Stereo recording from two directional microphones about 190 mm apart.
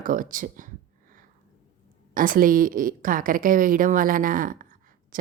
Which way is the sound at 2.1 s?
45° right (ahead or behind).